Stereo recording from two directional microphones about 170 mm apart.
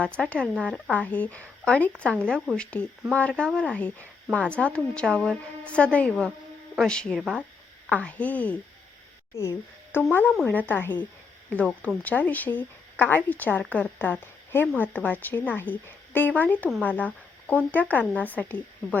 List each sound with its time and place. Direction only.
0.0 s speech: 5° left (ahead or behind)